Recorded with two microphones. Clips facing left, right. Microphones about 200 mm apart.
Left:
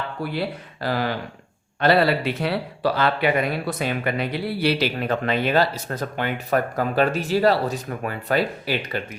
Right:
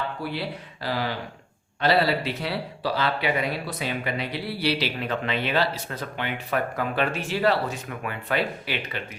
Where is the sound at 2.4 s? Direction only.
55° left (ahead or behind).